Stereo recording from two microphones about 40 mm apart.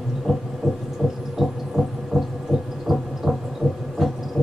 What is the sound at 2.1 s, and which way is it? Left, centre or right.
Heart murmur, centre.